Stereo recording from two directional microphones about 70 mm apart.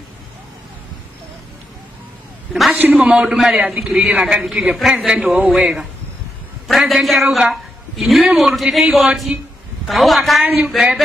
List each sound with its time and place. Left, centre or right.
2.7 s a man's voice: right
3.1 s a woman's voice: centre
10.4 s a man's voice: right
10.7 s a woman's voice: centre